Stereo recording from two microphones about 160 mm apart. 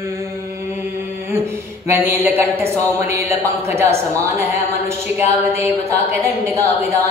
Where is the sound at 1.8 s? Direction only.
15° right (ahead or behind).